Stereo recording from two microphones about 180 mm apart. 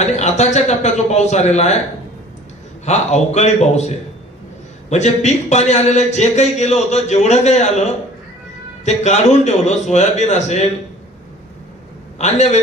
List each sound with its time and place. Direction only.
0.0 s a man's voice: 40° left (ahead or behind)
2.8 s a man's voice: 40° left (ahead or behind)
12.2 s a man's voice: 40° left (ahead or behind)